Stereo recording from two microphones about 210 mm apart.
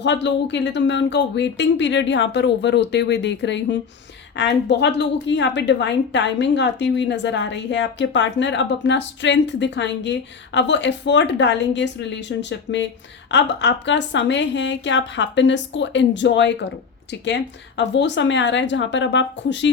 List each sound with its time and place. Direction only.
0.0 s a woman's voice: 55° left (ahead or behind)